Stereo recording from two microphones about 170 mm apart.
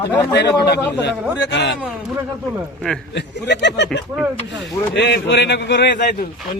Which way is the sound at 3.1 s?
90° left.